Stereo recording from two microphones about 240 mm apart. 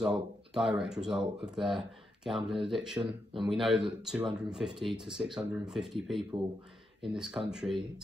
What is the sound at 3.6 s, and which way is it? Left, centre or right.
Speech, centre.